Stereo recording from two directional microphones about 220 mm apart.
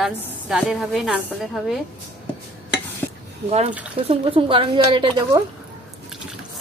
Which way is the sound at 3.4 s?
30° right (ahead or behind).